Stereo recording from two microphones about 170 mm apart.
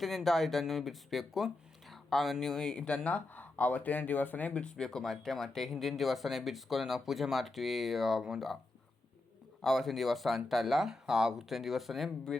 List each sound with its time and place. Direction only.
0.0 s speech: centre (ahead or behind)
9.6 s speech: centre (ahead or behind)